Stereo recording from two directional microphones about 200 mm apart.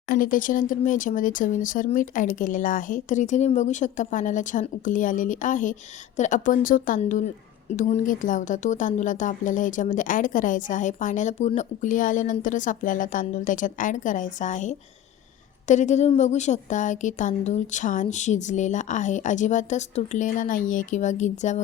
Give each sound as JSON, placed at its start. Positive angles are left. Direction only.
{"t": 0.1, "sound": "speech", "side_deg": 45}